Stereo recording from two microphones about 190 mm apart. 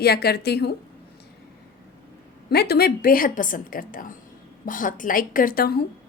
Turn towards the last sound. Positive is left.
turn(degrees=55)  # may be behind; listen again after turning